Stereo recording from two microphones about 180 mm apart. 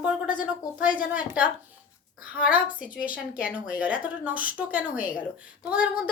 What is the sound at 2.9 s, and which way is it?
Speech, 10° right (ahead or behind).